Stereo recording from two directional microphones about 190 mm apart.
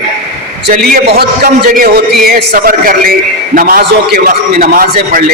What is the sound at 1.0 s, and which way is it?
A man's voice, 60° right (ahead or behind).